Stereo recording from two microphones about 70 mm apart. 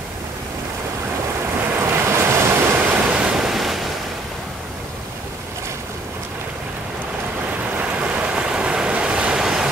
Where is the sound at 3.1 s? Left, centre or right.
Centre.